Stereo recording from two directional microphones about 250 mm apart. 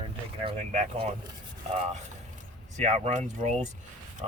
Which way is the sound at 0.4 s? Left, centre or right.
Right.